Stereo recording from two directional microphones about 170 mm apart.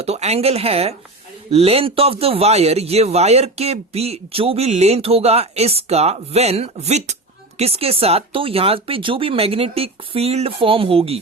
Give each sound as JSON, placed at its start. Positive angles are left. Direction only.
{"t": 0.0, "sound": "a man's voice", "side_deg": -40}